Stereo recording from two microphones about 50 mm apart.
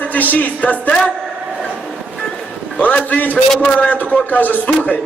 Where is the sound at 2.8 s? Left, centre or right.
Left.